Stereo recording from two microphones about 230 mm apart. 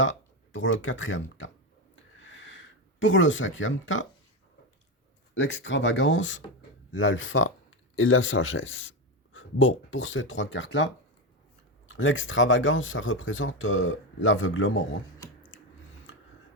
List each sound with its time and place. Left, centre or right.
0.5 s speech: left
2.2 s a sound: left
5.3 s speech: left
11.9 s speech: left